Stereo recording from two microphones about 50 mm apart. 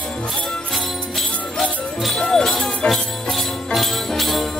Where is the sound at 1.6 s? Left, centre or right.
Centre.